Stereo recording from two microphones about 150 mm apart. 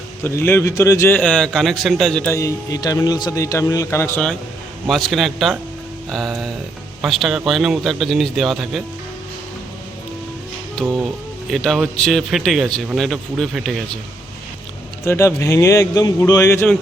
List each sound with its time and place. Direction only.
0.3 s a man's voice: 15° left (ahead or behind)
2.3 s speech: 20° left (ahead or behind)
4.9 s a man's voice: centre (ahead or behind)
10.8 s a man's voice: 5° left (ahead or behind)
15.0 s speech: 20° left (ahead or behind)